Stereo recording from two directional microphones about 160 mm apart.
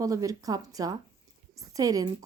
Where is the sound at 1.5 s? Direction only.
20° right (ahead or behind).